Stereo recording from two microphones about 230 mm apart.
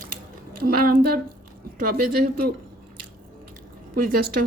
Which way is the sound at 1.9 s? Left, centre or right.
Right.